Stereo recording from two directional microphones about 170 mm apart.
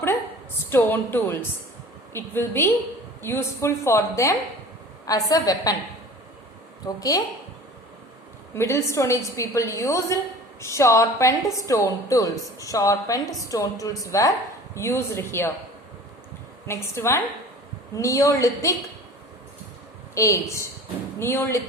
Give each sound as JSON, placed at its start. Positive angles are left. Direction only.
{"t": 0.7, "sound": "a woman's voice", "side_deg": 15}
{"t": 6.8, "sound": "a woman's voice", "side_deg": 20}
{"t": 8.5, "sound": "a woman's voice", "side_deg": 15}
{"t": 16.6, "sound": "a woman's voice", "side_deg": 15}
{"t": 20.1, "sound": "a woman's voice", "side_deg": 15}